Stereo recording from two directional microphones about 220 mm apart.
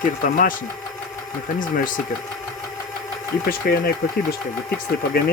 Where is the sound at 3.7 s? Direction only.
45° left (ahead or behind).